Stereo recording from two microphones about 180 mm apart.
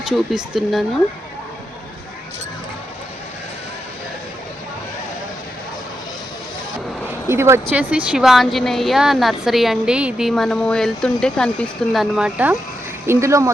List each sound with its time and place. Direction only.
0.0 s a woman's voice: 5° right (ahead or behind)
7.3 s a woman's voice: 15° right (ahead or behind)